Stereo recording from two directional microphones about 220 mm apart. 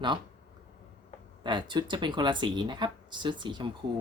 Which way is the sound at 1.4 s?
20° right (ahead or behind).